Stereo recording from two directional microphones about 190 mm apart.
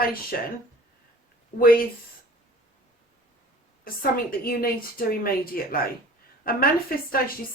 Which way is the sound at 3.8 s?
50° left (ahead or behind).